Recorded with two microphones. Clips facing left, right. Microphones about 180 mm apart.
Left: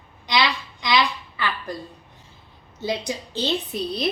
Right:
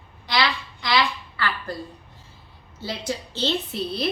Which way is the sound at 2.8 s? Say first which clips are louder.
Left 3 dB; 15° left (ahead or behind).